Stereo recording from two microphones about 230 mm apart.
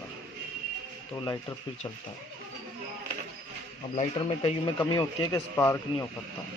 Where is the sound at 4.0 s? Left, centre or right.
Left.